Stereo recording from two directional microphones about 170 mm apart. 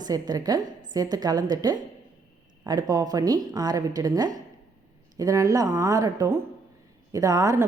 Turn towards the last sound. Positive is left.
turn(degrees=-20)  # may be behind; listen again after turning